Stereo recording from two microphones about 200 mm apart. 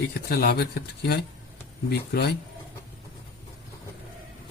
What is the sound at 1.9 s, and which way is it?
Speech, 55° left (ahead or behind).